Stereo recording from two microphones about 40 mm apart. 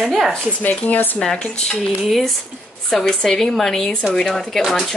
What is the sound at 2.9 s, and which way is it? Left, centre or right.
A woman's voice, centre.